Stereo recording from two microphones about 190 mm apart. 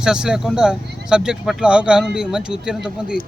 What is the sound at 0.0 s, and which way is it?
Speech, 5° right (ahead or behind).